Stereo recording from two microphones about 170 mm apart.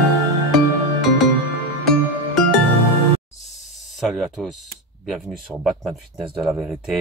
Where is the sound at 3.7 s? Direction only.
Centre (ahead or behind).